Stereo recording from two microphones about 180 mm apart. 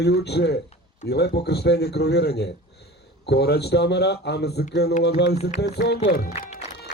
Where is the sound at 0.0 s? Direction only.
65° left (ahead or behind).